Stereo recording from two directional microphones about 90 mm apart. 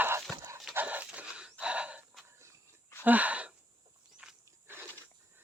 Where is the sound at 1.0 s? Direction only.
10° right (ahead or behind).